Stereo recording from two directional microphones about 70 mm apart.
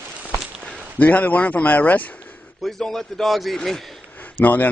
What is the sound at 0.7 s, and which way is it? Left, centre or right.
Speech, left.